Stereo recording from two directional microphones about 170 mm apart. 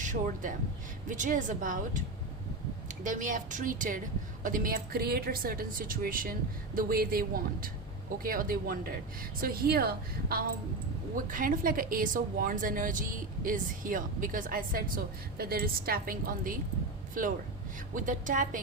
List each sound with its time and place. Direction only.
0.0 s a woman's voice: 50° right (ahead or behind)
3.0 s a woman's voice: 50° right (ahead or behind)